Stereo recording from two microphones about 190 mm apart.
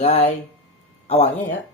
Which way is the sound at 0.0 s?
30° left (ahead or behind).